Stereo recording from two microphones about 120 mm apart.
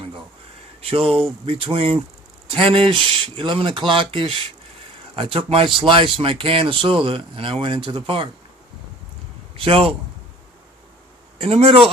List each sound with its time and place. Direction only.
0.8 s a man's voice: 50° right (ahead or behind)
9.6 s a man's voice: 50° right (ahead or behind)
11.3 s a man's voice: 55° right (ahead or behind)